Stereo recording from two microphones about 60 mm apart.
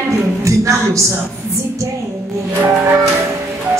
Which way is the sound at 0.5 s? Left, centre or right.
Right.